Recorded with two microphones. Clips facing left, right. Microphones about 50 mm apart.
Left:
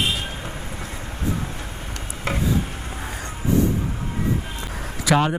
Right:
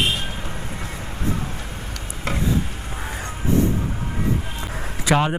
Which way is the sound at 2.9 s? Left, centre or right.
Right.